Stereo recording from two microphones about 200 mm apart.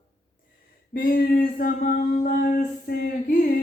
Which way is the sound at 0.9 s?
45° left (ahead or behind).